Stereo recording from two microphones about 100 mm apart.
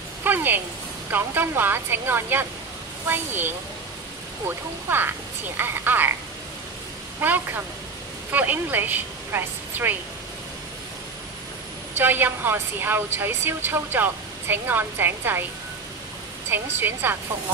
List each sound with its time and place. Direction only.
0.2 s a woman's voice: 20° right (ahead or behind)
7.2 s a woman's voice: 20° right (ahead or behind)
12.0 s a woman's voice: 20° right (ahead or behind)
16.4 s a woman's voice: 20° right (ahead or behind)